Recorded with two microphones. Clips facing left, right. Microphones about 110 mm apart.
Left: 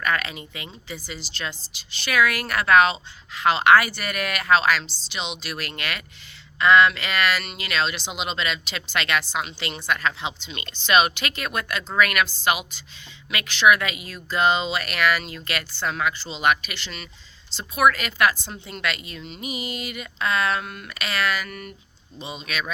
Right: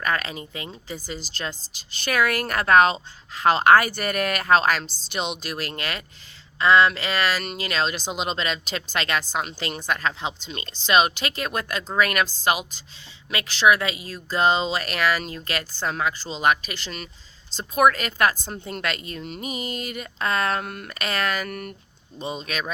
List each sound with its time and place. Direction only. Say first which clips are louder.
0.0 s speech: even; 35° right (ahead or behind)